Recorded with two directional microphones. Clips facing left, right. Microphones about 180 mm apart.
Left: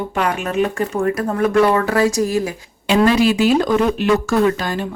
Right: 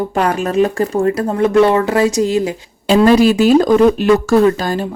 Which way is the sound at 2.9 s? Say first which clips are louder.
Right 4 dB; 40° right (ahead or behind).